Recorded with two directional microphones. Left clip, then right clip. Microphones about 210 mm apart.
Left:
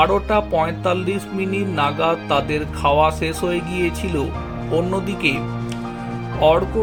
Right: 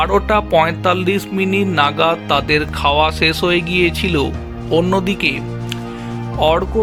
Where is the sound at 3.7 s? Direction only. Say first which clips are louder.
Right 7 dB; 55° right (ahead or behind).